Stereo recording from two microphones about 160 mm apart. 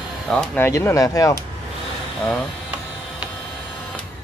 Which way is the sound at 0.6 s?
15° left (ahead or behind).